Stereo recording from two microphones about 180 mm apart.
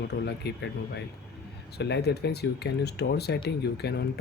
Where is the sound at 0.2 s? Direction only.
65° left (ahead or behind).